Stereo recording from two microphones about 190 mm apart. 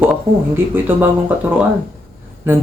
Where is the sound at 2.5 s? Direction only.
10° right (ahead or behind).